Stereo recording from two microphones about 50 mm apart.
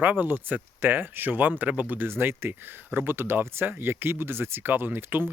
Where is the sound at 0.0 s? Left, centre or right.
Right.